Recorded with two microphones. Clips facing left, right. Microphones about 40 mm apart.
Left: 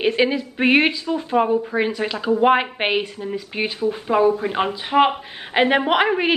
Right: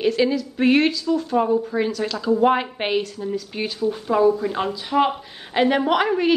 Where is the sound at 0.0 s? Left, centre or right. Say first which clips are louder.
Left 1 dB; left.